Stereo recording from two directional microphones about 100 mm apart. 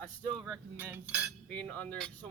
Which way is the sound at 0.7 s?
15° right (ahead or behind).